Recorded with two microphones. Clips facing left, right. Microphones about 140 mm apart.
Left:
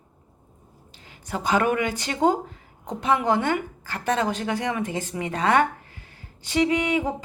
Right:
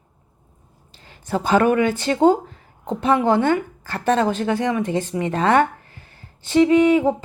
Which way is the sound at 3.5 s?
35° right (ahead or behind).